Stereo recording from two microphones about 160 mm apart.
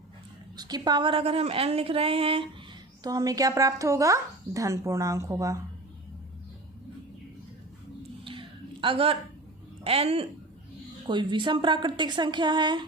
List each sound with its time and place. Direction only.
0.5 s a woman's voice: 25° right (ahead or behind)
3.0 s speech: 25° right (ahead or behind)
8.2 s a sound: 35° right (ahead or behind)
9.8 s a woman's voice: 40° right (ahead or behind)